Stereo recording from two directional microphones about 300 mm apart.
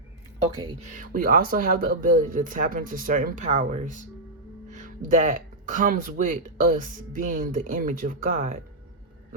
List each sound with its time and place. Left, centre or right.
0.6 s speech: right